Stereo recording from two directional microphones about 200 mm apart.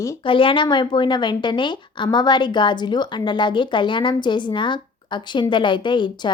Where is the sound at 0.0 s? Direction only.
25° left (ahead or behind).